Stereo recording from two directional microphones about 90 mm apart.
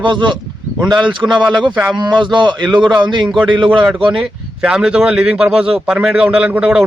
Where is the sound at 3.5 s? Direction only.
65° right (ahead or behind).